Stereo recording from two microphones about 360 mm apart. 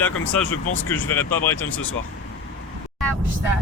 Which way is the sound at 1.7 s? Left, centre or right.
Left.